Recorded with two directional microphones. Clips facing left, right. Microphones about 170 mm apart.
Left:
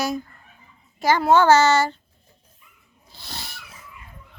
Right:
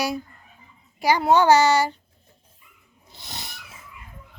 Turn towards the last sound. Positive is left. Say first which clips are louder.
# left 1 dB
turn(degrees=-20)  # may be behind; listen again after turning